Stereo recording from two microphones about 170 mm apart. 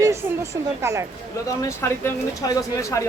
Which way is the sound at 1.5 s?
15° left (ahead or behind).